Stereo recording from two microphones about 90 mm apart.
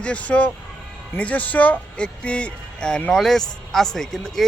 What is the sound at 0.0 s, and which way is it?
Speech, 15° left (ahead or behind).